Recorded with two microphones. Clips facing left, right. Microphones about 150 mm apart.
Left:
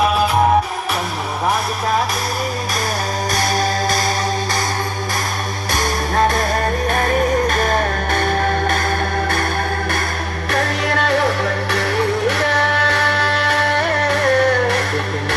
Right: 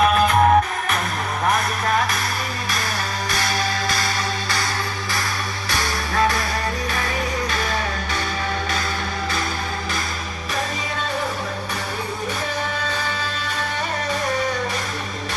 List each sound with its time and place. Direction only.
5.7 s music: 50° left (ahead or behind)
10.5 s music: 65° left (ahead or behind)